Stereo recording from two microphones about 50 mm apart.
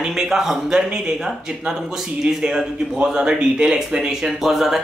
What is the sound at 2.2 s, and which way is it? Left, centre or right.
Speech, centre.